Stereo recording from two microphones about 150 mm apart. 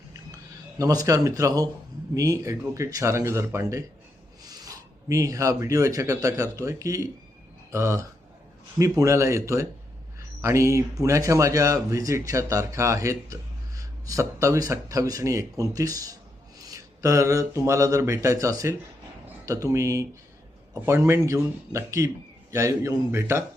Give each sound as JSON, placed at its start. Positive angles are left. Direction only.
{"t": 0.8, "sound": "speech", "side_deg": -20}